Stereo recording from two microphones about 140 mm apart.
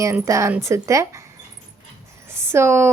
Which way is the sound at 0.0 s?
20° right (ahead or behind).